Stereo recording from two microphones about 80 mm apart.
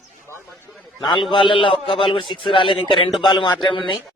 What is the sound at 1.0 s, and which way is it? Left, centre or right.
A man's voice, left.